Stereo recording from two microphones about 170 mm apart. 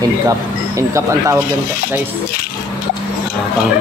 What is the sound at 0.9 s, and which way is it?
Speech, 15° right (ahead or behind).